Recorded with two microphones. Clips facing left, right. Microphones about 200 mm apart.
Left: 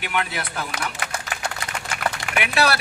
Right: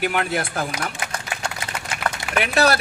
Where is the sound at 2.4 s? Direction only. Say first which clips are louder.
Right 3 dB; 40° right (ahead or behind).